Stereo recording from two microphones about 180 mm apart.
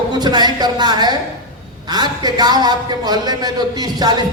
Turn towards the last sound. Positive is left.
turn(degrees=-20)  # may be behind; listen again after turning